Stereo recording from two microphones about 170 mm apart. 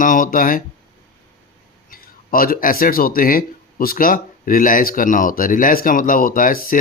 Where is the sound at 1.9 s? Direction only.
55° left (ahead or behind).